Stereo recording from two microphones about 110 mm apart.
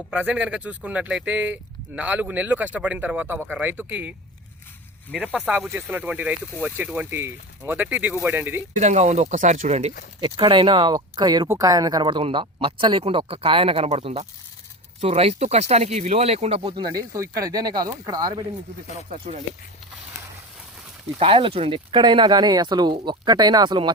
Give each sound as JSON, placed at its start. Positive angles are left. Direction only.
{"t": 0.1, "sound": "speech", "side_deg": -15}
{"t": 5.1, "sound": "speech", "side_deg": -10}
{"t": 8.7, "sound": "speech", "side_deg": -90}
{"t": 10.3, "sound": "speech", "side_deg": -50}
{"t": 10.9, "sound": "speech", "side_deg": -35}
{"t": 16.7, "sound": "speech", "side_deg": -35}
{"t": 21.2, "sound": "speech", "side_deg": -55}